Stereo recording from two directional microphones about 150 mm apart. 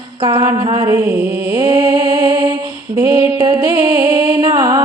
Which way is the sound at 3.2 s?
15° right (ahead or behind).